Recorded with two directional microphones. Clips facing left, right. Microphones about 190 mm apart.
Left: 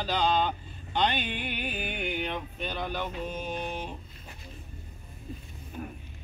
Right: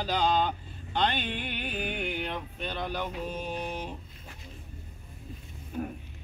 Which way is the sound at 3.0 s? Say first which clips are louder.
Even; 5° right (ahead or behind).